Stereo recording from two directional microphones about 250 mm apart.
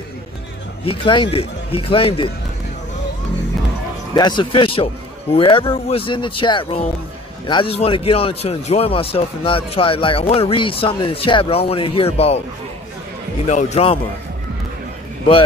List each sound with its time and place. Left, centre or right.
0.8 s a man's voice: centre
4.1 s a man's voice: centre
13.5 s a man's voice: left